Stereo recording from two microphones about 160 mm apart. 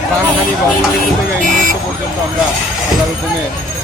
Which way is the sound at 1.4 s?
55° right (ahead or behind).